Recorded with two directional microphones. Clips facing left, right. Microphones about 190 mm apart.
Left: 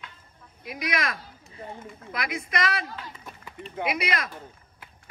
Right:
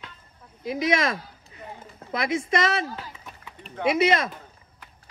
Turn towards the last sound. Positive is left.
turn(degrees=-25)  # may be behind; listen again after turning